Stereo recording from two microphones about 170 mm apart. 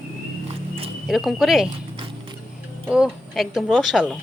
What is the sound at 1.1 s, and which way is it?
Speech, centre (ahead or behind).